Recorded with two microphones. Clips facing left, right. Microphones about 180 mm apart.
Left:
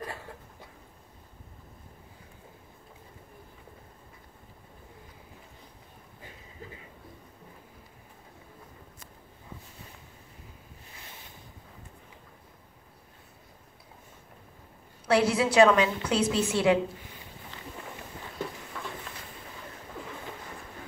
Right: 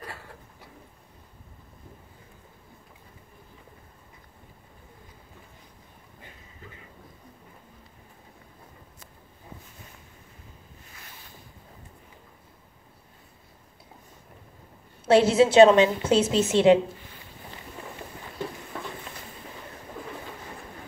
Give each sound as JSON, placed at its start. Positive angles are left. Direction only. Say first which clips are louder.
{"t": 15.0, "sound": "a woman's voice", "louder": "right 6 dB", "side_deg": -25}